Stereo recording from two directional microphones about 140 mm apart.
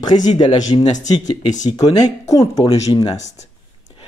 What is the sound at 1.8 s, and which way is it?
Speech, 25° left (ahead or behind).